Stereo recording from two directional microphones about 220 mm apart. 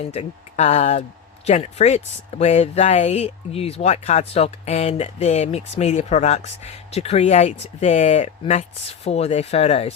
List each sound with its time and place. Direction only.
0.0 s speech: 30° left (ahead or behind)